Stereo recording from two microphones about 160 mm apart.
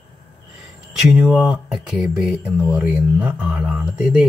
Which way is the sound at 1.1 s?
5° right (ahead or behind).